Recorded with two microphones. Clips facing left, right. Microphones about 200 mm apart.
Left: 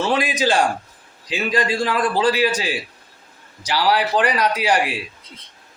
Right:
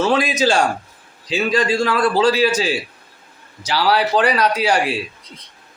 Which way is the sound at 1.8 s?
15° left (ahead or behind).